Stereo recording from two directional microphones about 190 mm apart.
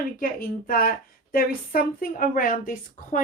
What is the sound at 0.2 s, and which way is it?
A woman's voice, 50° left (ahead or behind).